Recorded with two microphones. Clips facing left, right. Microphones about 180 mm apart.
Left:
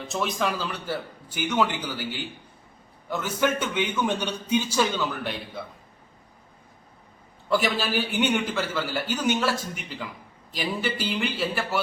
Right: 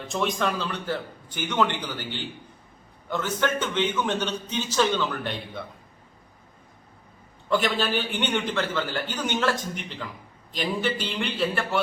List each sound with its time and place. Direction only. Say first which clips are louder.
0.1 s a man's voice: right 1 dB; 5° left (ahead or behind)
7.5 s a man's voice: even; 10° left (ahead or behind)